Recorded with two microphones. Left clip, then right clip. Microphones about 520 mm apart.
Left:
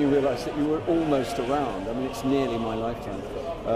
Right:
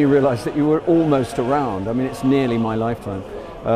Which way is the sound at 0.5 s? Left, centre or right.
Right.